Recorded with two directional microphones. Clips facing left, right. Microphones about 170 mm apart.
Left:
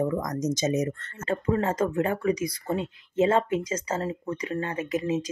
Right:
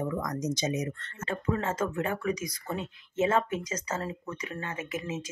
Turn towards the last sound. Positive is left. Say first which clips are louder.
# left 8 dB
turn(degrees=35)  # may be behind; listen again after turning